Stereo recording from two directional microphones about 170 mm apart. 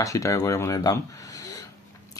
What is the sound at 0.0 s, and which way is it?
Speech, 20° left (ahead or behind).